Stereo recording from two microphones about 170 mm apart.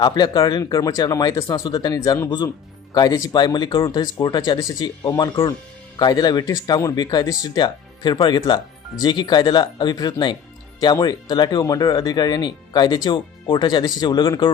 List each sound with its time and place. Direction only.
0.0 s speech: 25° left (ahead or behind)